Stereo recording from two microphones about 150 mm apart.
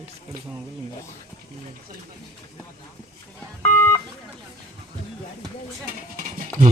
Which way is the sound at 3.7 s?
15° left (ahead or behind).